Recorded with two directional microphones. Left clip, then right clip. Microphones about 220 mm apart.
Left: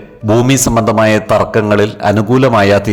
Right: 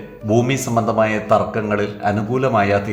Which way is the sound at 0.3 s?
45° left (ahead or behind).